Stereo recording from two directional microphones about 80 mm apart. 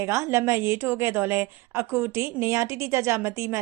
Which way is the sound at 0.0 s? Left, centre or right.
Right.